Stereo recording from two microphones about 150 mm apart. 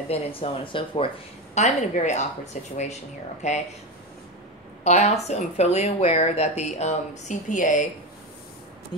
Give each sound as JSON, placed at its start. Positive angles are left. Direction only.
{"t": 0.1, "sound": "a woman's voice", "side_deg": 40}
{"t": 4.8, "sound": "a woman's voice", "side_deg": 50}